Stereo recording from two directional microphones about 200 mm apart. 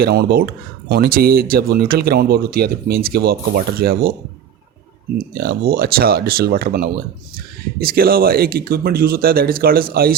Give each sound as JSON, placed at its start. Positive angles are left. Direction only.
{"t": 0.0, "sound": "speech", "side_deg": -50}
{"t": 5.1, "sound": "speech", "side_deg": -50}